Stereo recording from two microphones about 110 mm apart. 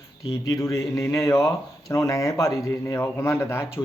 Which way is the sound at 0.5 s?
30° left (ahead or behind).